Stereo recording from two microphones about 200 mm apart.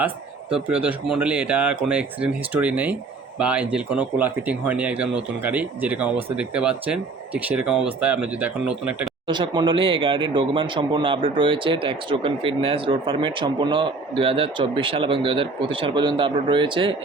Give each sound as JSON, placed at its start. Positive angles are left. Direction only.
{"t": 0.5, "sound": "speech", "side_deg": -5}
{"t": 9.2, "sound": "speech", "side_deg": -25}